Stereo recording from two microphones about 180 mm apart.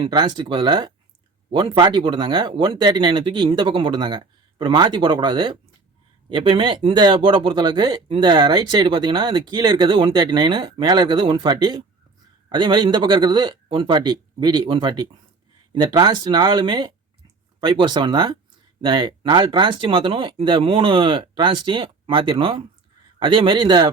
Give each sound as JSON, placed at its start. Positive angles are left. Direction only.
{"t": 0.0, "sound": "speech", "side_deg": -25}